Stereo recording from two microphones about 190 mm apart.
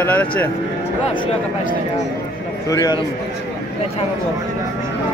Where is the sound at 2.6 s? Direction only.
20° left (ahead or behind).